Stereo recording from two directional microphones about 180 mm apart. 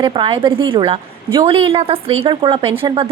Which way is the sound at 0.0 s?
25° right (ahead or behind).